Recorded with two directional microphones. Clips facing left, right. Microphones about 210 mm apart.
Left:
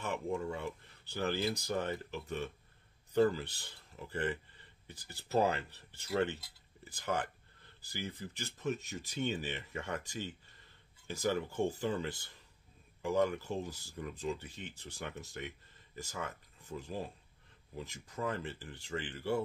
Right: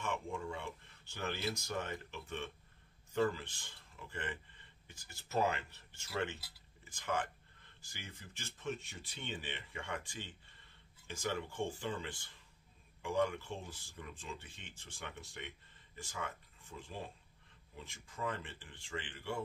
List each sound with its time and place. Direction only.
0.0 s speech: 40° left (ahead or behind)